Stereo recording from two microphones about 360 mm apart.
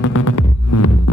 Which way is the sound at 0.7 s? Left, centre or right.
Left.